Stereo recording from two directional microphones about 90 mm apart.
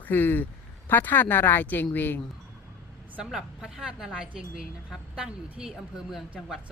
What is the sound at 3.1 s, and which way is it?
A woman's voice, 5° right (ahead or behind).